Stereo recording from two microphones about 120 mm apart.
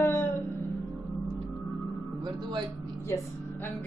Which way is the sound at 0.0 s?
20° left (ahead or behind).